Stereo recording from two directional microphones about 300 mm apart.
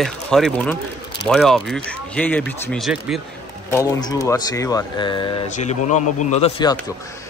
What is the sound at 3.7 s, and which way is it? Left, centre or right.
Speech, centre.